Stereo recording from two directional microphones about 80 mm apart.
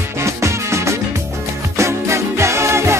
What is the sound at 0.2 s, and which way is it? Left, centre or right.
Music, right.